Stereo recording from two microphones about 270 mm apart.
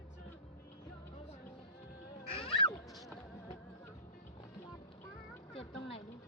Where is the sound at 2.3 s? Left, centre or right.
Left.